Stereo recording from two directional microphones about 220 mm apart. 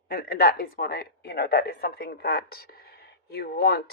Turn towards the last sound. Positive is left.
turn(degrees=45)  # may be behind; listen again after turning